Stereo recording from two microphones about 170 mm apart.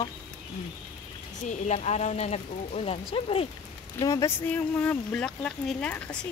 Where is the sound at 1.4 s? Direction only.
40° left (ahead or behind).